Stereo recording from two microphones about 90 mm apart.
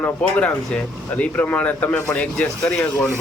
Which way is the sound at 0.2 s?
10° left (ahead or behind).